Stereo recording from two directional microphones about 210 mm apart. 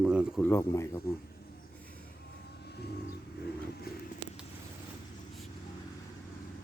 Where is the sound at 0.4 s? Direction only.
10° left (ahead or behind).